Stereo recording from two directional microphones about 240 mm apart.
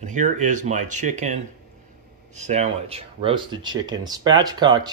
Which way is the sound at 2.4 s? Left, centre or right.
Right.